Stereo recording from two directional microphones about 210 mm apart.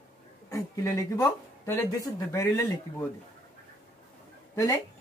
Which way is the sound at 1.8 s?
15° left (ahead or behind).